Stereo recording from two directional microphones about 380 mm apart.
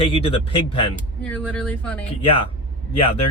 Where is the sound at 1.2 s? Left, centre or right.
Centre.